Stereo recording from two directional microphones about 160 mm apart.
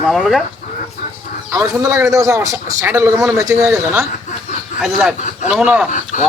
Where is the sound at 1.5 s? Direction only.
20° right (ahead or behind).